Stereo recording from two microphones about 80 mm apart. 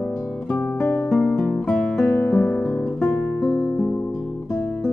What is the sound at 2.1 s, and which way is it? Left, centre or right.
Music, centre.